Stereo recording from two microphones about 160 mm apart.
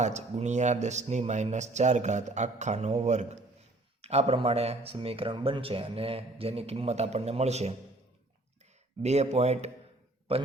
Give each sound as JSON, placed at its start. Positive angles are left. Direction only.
{"t": 0.0, "sound": "speech", "side_deg": -45}
{"t": 9.0, "sound": "speech", "side_deg": -45}